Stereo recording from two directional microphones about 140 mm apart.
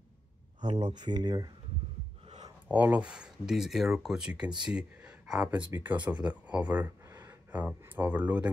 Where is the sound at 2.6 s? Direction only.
10° right (ahead or behind).